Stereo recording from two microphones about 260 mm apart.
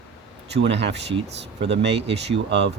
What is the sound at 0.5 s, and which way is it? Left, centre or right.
Speech, right.